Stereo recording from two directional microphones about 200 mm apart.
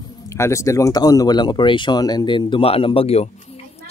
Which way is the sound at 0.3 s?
15° left (ahead or behind).